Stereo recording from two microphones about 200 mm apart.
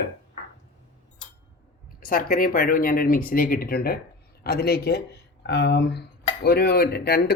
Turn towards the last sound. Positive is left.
turn(degrees=50)  # may be behind; listen again after turning